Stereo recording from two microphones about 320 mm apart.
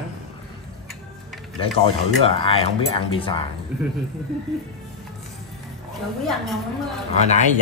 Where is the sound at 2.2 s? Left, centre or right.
Centre.